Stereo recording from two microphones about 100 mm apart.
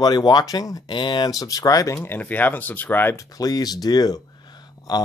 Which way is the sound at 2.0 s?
20° left (ahead or behind).